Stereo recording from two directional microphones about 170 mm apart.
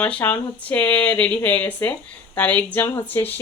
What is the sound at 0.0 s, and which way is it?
Speech, 10° left (ahead or behind).